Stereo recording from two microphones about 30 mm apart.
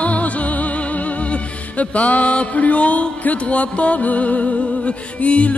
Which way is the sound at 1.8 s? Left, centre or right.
Left.